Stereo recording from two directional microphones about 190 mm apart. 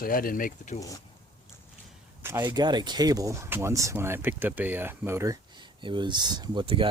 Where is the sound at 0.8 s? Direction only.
20° left (ahead or behind).